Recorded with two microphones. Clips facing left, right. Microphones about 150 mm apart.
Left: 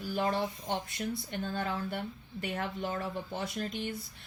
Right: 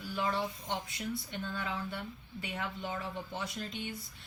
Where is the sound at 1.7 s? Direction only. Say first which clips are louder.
Left 4 dB; 55° left (ahead or behind).